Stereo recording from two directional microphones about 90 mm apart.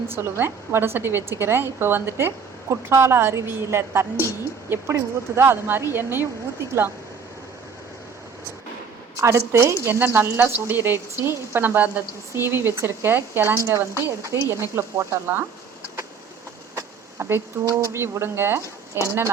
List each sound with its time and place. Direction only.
0.2 s a woman's voice: 25° right (ahead or behind)
9.1 s a woman's voice: 30° right (ahead or behind)
16.7 s speech: 30° right (ahead or behind)